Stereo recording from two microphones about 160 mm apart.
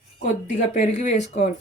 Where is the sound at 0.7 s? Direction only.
45° left (ahead or behind).